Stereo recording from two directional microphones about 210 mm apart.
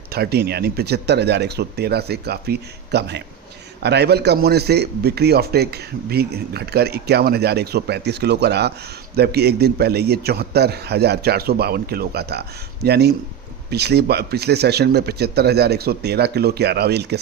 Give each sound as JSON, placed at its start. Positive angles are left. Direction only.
{"t": 0.1, "sound": "a man's voice", "side_deg": -50}